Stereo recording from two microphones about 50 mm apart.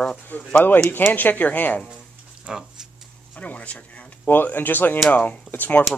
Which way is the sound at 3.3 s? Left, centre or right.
Left.